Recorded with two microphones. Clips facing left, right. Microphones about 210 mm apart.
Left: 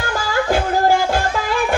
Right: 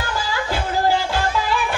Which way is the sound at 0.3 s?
50° left (ahead or behind).